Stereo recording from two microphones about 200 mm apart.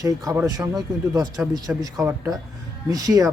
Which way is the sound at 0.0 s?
15° right (ahead or behind).